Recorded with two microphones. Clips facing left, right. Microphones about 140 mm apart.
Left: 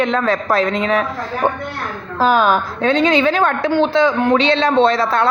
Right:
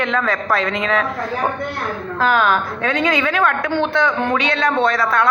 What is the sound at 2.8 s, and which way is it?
Speech, 25° left (ahead or behind).